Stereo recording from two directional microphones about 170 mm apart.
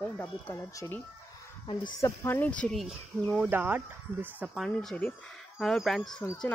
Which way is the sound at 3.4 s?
10° right (ahead or behind).